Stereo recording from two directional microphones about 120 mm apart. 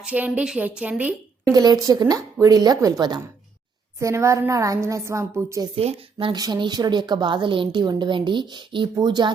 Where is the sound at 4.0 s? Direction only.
25° right (ahead or behind).